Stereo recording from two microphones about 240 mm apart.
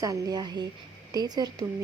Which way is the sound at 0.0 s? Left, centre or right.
Centre.